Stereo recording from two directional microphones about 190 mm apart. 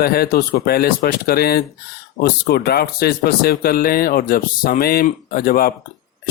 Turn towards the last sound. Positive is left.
turn(degrees=50)  # may be behind; listen again after turning